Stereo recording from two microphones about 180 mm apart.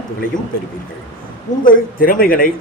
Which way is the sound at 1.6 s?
50° left (ahead or behind).